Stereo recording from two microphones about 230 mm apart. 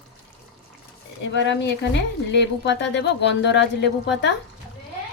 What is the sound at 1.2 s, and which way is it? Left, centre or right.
Speech, left.